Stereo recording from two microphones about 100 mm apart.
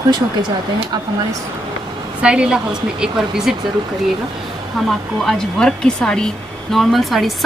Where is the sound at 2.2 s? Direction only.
10° right (ahead or behind).